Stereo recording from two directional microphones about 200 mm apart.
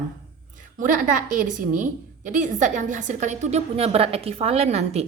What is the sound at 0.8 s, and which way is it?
A woman's voice, 40° right (ahead or behind).